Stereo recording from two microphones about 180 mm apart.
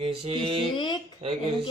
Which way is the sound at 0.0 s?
30° right (ahead or behind).